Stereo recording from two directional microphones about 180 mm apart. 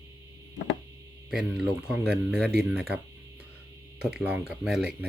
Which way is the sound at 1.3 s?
5° right (ahead or behind).